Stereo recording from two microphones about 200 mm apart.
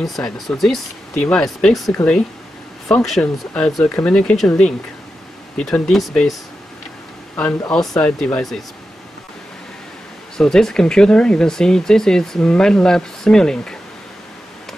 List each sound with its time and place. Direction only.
0.0 s speech: centre (ahead or behind)
2.9 s speech: centre (ahead or behind)
7.7 s speech: 5° left (ahead or behind)
10.3 s speech: 5° left (ahead or behind)